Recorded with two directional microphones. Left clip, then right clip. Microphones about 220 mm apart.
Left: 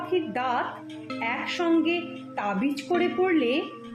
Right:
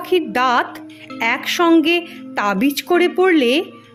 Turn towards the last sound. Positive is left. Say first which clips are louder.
# right 9 dB
turn(degrees=-50)  # may be behind; listen again after turning